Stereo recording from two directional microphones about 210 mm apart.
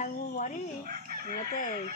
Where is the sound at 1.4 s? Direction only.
40° left (ahead or behind).